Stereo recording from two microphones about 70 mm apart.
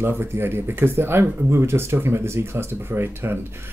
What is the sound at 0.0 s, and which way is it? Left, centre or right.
Speech, right.